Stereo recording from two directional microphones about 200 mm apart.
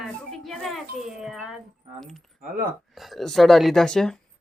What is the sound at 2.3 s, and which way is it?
Speech, 40° right (ahead or behind).